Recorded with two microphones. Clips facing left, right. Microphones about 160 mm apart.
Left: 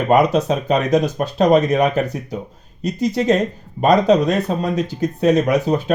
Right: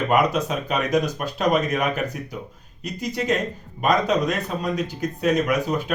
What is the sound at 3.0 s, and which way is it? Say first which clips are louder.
Speech: left 7 dB; 30° left (ahead or behind).